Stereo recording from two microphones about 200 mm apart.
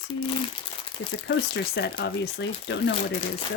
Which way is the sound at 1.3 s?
60° left (ahead or behind).